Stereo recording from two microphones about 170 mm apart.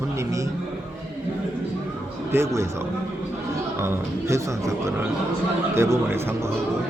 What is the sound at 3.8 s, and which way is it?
Speech, 15° right (ahead or behind).